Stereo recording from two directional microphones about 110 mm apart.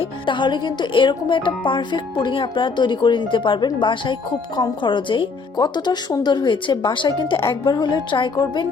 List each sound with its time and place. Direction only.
0.0 s a woman's voice: 45° left (ahead or behind)